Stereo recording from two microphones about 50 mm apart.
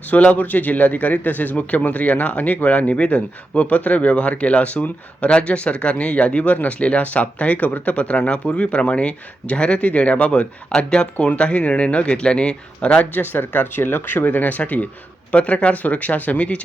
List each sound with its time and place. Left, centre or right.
0.1 s a man's voice: left
13.1 s a man's voice: left